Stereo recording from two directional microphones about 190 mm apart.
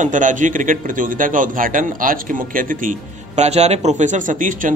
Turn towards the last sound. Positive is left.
turn(degrees=-45)  # may be behind; listen again after turning